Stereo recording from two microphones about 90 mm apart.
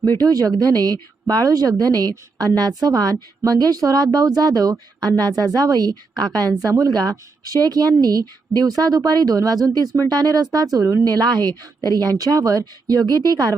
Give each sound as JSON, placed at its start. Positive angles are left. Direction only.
{"t": 0.2, "sound": "a woman's voice", "side_deg": -45}